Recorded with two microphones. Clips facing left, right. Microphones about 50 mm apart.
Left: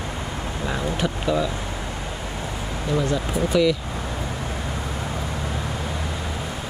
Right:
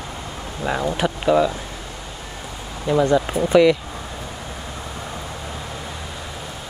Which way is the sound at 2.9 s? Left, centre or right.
Right.